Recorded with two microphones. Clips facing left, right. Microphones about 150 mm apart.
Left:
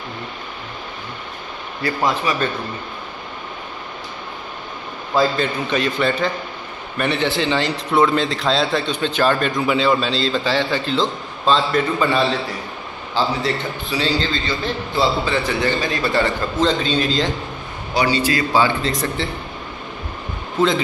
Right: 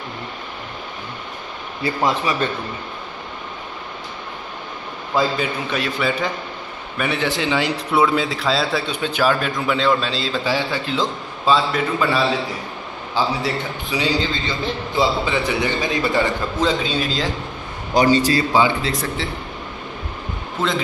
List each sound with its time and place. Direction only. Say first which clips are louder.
1.8 s speech: even; 25° right (ahead or behind)
5.7 s a man's voice: left 4 dB; 5° right (ahead or behind)
13.1 s a man's voice: left 1 dB; 15° right (ahead or behind)
17.9 s a man's voice: right 3 dB; 40° right (ahead or behind)
18.5 s a man's voice: even; 15° right (ahead or behind)